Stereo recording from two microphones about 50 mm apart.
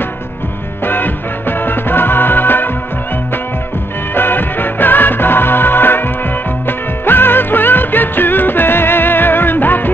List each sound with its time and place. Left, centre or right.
0.8 s music: left
4.1 s music: left
7.1 s music: left